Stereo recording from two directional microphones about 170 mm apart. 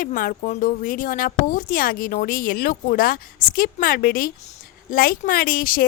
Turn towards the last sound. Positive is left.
turn(degrees=60)  # may be behind; listen again after turning